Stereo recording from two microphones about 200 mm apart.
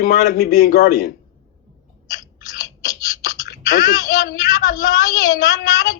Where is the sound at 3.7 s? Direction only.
40° left (ahead or behind).